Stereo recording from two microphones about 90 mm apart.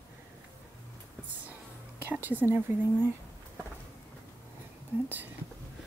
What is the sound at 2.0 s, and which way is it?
Speech, 20° right (ahead or behind).